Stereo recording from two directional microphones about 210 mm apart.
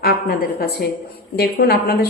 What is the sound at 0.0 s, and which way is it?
A woman's voice, 45° left (ahead or behind).